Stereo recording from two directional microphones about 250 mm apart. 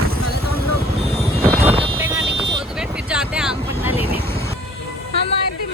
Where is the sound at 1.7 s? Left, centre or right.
Right.